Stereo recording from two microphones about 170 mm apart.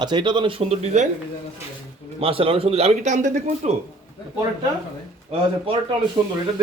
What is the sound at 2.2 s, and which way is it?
Speech, 35° right (ahead or behind).